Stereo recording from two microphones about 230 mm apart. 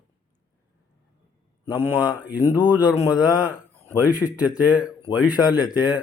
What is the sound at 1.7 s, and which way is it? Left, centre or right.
Speech, centre.